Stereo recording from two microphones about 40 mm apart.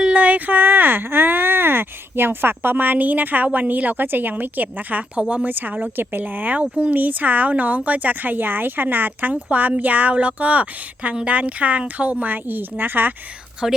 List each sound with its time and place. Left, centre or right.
0.1 s speech: right
6.6 s speech: right
7.0 s speech: right
9.3 s speech: right
13.6 s speech: centre